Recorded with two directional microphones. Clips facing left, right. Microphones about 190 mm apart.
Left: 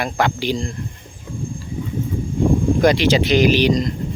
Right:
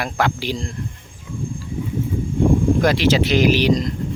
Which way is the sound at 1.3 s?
35° left (ahead or behind).